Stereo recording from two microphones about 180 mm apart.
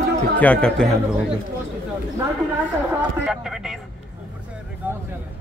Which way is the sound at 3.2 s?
5° right (ahead or behind).